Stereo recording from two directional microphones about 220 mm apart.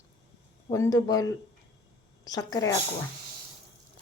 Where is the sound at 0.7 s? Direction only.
15° left (ahead or behind).